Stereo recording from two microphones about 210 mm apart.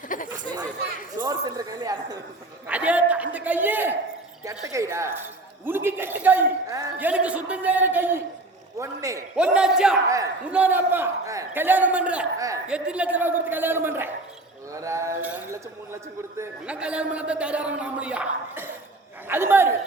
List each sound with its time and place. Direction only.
0.1 s speech: 40° left (ahead or behind)
1.2 s a man's voice: 20° right (ahead or behind)
2.6 s a man's voice: 5° right (ahead or behind)
9.3 s a man's voice: 5° right (ahead or behind)
16.4 s a man's voice: 5° right (ahead or behind)